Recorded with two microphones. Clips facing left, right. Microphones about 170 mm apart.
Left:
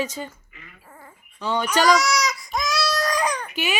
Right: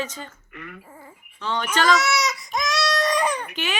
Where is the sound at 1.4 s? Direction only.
10° left (ahead or behind).